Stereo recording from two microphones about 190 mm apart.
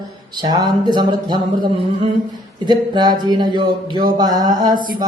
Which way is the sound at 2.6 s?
20° right (ahead or behind).